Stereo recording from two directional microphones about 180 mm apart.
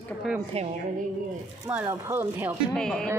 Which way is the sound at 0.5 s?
35° right (ahead or behind).